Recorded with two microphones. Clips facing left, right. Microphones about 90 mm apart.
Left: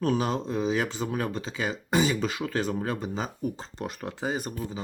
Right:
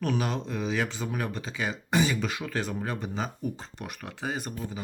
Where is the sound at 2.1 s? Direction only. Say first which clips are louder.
Left 3 dB; 30° left (ahead or behind).